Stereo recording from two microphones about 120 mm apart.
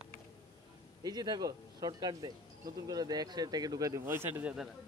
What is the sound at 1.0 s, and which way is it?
Speech, 35° right (ahead or behind).